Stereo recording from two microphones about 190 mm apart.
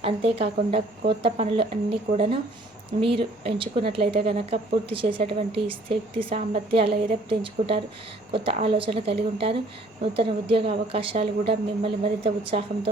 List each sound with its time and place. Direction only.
0.0 s speech: 30° right (ahead or behind)
8.3 s a woman's voice: 30° right (ahead or behind)